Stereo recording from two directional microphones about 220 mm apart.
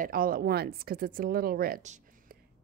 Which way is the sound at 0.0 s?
40° right (ahead or behind).